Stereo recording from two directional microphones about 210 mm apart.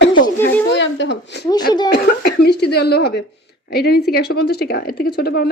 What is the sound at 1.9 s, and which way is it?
Speech, 50° left (ahead or behind).